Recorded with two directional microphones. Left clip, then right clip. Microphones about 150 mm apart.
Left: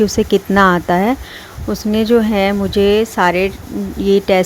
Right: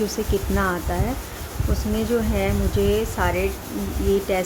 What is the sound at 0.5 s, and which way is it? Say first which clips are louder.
Speech: left 15 dB; 75° left (ahead or behind).